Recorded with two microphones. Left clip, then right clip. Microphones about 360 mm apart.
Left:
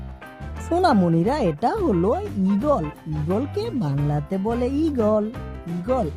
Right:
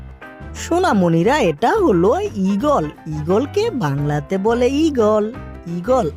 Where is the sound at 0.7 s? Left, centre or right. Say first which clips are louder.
Right 3 dB; centre.